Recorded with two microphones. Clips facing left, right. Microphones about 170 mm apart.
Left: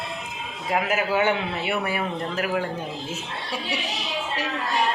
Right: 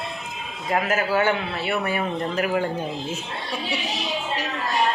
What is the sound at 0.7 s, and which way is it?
A man's voice, 15° left (ahead or behind).